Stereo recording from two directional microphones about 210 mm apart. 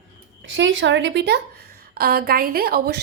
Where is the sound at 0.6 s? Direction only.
60° right (ahead or behind).